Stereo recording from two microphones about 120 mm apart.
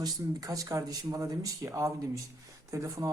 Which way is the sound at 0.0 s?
30° right (ahead or behind).